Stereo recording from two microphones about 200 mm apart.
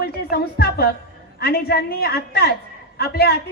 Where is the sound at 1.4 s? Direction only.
55° left (ahead or behind).